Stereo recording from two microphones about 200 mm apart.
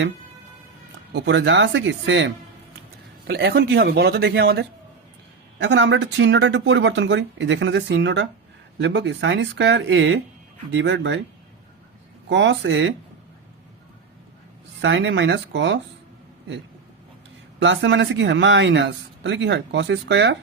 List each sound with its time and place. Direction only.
1.1 s speech: 60° right (ahead or behind)
12.3 s speech: 65° right (ahead or behind)
14.8 s speech: 65° right (ahead or behind)
17.6 s speech: 65° right (ahead or behind)